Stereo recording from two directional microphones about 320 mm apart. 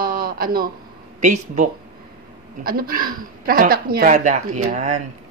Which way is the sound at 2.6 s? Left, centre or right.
Right.